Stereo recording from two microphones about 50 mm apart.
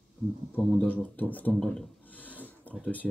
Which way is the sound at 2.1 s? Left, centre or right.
Left.